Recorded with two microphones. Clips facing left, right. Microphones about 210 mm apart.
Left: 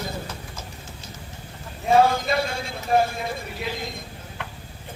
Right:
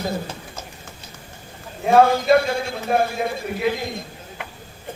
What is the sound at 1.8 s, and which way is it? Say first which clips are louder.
A man's voice: right 3 dB; 55° right (ahead or behind).